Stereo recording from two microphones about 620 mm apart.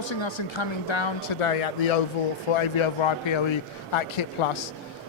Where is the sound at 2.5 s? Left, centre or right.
Left.